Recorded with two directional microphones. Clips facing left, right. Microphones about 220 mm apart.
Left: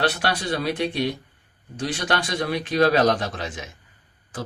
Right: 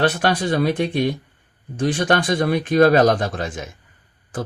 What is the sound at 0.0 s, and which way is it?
A man's voice, 50° right (ahead or behind).